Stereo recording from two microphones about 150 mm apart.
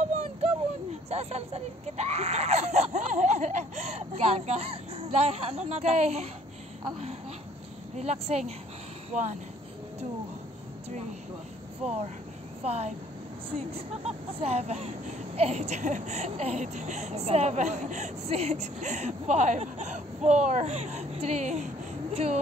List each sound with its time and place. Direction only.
0.1 s a sound: 45° right (ahead or behind)
1.1 s speech: 45° right (ahead or behind)
8.0 s speech: 45° right (ahead or behind)
12.6 s speech: 45° right (ahead or behind)